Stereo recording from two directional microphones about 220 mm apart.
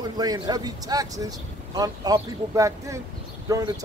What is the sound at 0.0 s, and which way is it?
Speech, 15° right (ahead or behind).